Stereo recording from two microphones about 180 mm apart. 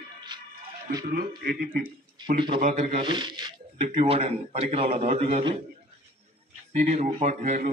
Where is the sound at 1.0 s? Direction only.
55° right (ahead or behind).